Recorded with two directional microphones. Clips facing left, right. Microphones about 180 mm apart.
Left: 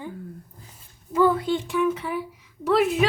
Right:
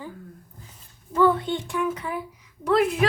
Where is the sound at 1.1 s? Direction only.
5° left (ahead or behind).